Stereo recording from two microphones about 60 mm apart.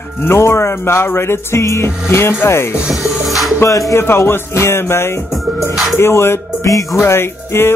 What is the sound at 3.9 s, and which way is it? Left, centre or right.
Music, left.